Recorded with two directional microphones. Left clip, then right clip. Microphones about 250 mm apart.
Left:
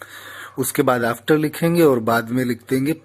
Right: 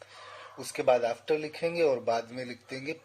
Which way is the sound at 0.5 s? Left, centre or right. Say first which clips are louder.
Left 7 dB; centre.